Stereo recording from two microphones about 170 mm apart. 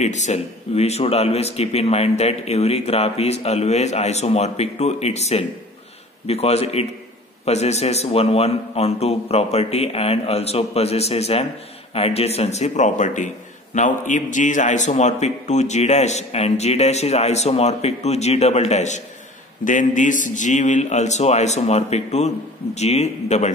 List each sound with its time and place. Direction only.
0.0 s a man's voice: 45° left (ahead or behind)